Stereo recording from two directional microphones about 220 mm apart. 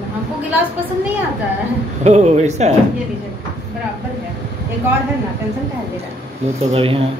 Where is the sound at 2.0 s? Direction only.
30° right (ahead or behind).